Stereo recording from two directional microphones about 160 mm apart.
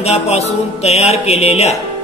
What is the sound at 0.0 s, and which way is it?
Speech, 40° left (ahead or behind).